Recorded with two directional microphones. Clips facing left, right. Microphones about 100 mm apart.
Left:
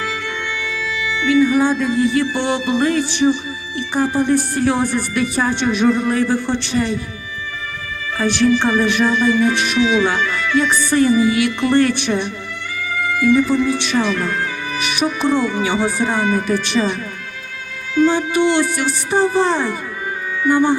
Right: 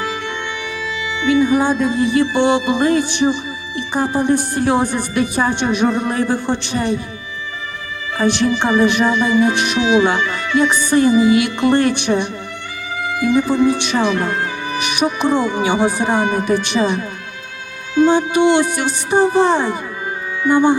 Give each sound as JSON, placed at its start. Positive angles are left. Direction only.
{"t": 0.0, "sound": "music", "side_deg": -20}
{"t": 3.8, "sound": "speech", "side_deg": -20}
{"t": 8.2, "sound": "speech", "side_deg": -20}